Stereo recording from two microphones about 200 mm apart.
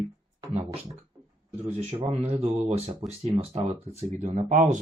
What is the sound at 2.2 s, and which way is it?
Speech, 30° right (ahead or behind).